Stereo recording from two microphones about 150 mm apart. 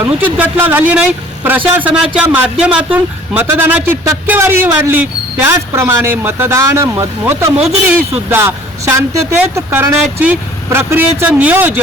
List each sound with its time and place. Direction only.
0.0 s speech: 10° right (ahead or behind)